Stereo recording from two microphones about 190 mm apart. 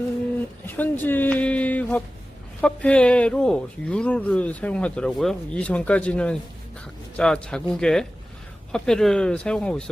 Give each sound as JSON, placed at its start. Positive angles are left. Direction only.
{"t": 0.7, "sound": "speech", "side_deg": 10}